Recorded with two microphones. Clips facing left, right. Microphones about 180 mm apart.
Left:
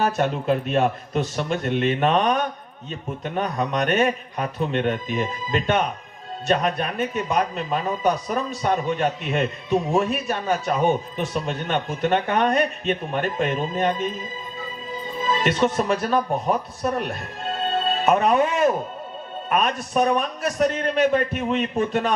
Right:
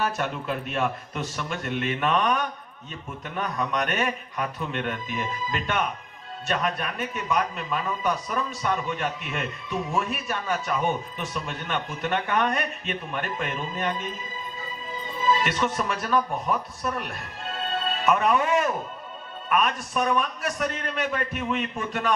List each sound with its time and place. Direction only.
0.0 s a man's voice: 30° left (ahead or behind)
15.3 s music: 25° left (ahead or behind)
15.7 s a man's voice: 30° left (ahead or behind)